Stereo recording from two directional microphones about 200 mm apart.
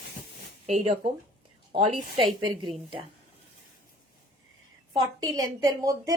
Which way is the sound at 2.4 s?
25° right (ahead or behind).